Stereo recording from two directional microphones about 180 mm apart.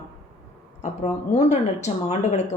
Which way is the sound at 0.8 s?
40° left (ahead or behind).